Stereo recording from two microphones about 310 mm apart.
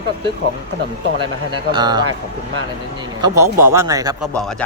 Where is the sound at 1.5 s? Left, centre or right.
Centre.